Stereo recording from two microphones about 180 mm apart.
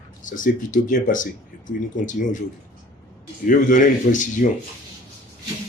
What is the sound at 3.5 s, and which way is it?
Speech, 45° left (ahead or behind).